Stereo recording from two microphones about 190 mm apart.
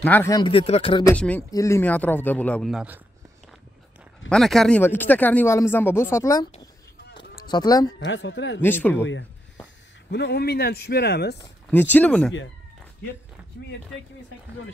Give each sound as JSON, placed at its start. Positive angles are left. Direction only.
{"t": 0.0, "sound": "speech", "side_deg": 10}
{"t": 0.5, "sound": "speech", "side_deg": 30}
{"t": 1.0, "sound": "speech", "side_deg": 5}
{"t": 4.3, "sound": "speech", "side_deg": 0}
{"t": 7.4, "sound": "speech", "side_deg": 20}
{"t": 8.0, "sound": "speech", "side_deg": 75}
{"t": 8.5, "sound": "speech", "side_deg": 10}
{"t": 10.1, "sound": "a man's voice", "side_deg": 60}
{"t": 11.7, "sound": "speech", "side_deg": 10}